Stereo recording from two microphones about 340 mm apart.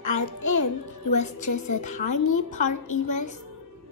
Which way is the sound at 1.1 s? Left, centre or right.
Left.